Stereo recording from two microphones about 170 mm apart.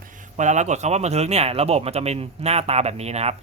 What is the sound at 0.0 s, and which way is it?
Speech, 45° right (ahead or behind).